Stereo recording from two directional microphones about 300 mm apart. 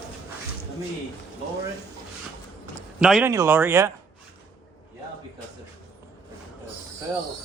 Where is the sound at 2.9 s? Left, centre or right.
Centre.